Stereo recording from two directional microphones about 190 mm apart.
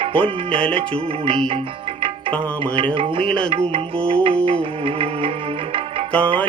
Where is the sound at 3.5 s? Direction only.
30° right (ahead or behind).